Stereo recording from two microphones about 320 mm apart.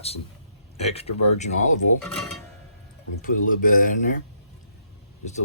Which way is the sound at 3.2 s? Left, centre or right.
Left.